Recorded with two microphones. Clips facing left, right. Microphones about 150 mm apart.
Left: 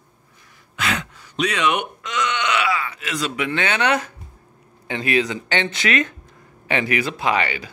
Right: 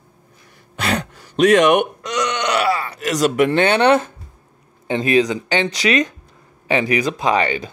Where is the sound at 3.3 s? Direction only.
45° right (ahead or behind); by 7.3 s 15° right (ahead or behind).